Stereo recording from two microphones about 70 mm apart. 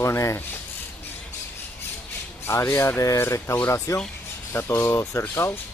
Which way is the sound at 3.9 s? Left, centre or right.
Left.